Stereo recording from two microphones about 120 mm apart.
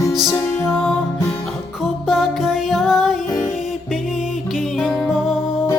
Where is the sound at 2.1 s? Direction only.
Centre (ahead or behind).